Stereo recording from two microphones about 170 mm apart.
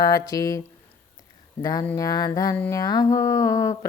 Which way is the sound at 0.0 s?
20° left (ahead or behind).